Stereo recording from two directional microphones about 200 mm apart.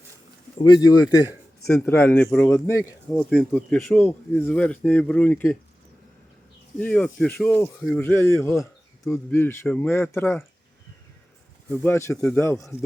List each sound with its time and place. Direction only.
0.6 s speech: 20° left (ahead or behind)
1.6 s speech: 5° left (ahead or behind)
3.1 s speech: centre (ahead or behind)
6.7 s speech: 5° left (ahead or behind)
11.7 s speech: 10° left (ahead or behind)